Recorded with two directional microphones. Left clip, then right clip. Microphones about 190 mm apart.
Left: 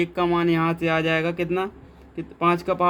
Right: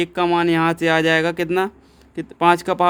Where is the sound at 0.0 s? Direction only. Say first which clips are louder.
Right 4 dB; 45° right (ahead or behind).